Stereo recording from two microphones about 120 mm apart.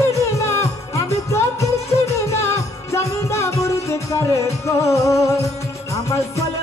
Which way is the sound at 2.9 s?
25° left (ahead or behind).